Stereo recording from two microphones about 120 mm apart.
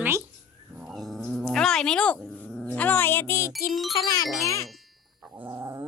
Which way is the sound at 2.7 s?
15° left (ahead or behind).